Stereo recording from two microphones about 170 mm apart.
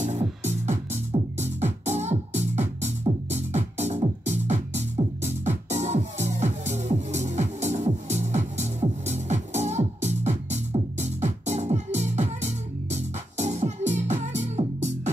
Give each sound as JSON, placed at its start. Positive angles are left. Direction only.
{"t": 0.0, "sound": "music", "side_deg": -45}